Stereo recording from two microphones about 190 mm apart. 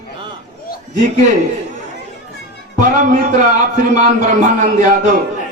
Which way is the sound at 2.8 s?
40° right (ahead or behind).